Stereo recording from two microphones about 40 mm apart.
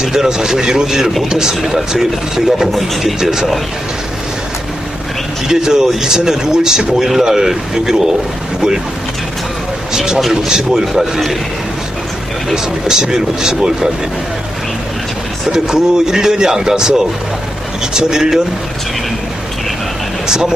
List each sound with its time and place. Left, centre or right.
0.0 s speech: centre
2.7 s a man's voice: centre
3.2 s speech: centre
5.5 s speech: centre
9.9 s speech: centre
12.5 s speech: centre
15.5 s speech: centre
17.9 s speech: centre
20.2 s speech: centre